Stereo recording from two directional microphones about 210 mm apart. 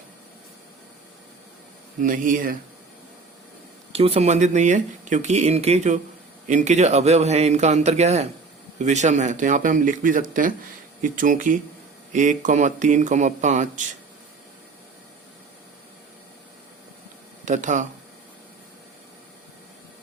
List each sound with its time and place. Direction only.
2.0 s speech: 40° right (ahead or behind)
3.9 s speech: 30° right (ahead or behind)
17.4 s speech: 35° right (ahead or behind)